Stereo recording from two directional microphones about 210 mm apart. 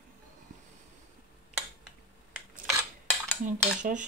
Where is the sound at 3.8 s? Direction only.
35° right (ahead or behind).